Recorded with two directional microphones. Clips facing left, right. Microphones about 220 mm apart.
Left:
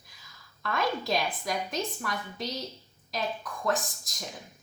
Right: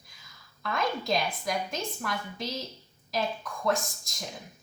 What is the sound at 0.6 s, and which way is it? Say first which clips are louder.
A woman's voice: left 1 dB; centre (ahead or behind).